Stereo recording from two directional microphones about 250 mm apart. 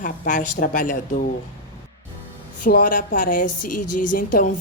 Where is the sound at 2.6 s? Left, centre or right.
Left.